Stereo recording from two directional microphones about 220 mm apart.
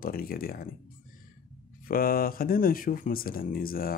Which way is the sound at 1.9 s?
40° left (ahead or behind).